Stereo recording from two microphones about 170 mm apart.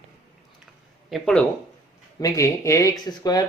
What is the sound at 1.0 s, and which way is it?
Speech, centre (ahead or behind).